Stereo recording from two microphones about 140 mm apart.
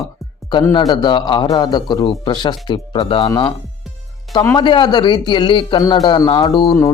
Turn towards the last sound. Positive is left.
turn(degrees=25)  # may be behind; listen again after turning